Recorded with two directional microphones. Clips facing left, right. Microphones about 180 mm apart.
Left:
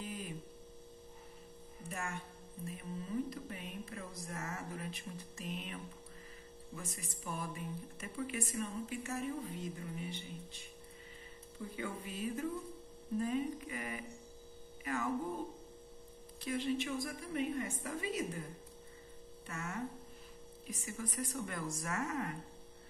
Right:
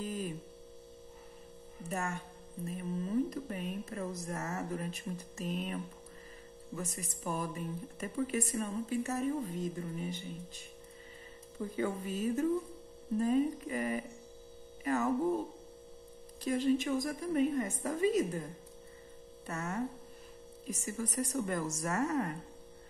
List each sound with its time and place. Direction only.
0.0 s mains hum: 40° right (ahead or behind)
1.8 s speech: 40° right (ahead or behind)
6.8 s speech: 40° right (ahead or behind)
11.7 s speech: 40° right (ahead or behind)
16.4 s speech: 40° right (ahead or behind)